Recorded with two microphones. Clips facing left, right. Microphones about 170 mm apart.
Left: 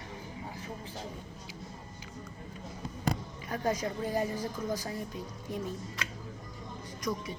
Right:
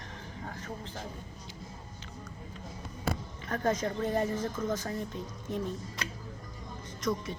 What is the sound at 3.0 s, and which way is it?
Music, 10° left (ahead or behind).